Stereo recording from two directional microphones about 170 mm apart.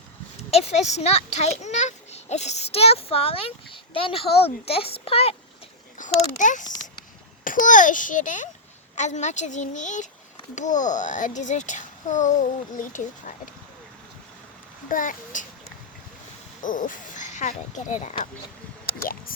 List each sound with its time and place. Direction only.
0.5 s a child's voice: 40° left (ahead or behind)
6.0 s a child's voice: 50° left (ahead or behind)
14.8 s a child's voice: 50° left (ahead or behind)
16.6 s speech: 50° left (ahead or behind)